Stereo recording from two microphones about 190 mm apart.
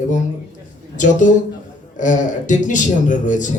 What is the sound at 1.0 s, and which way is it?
Speech, 40° left (ahead or behind).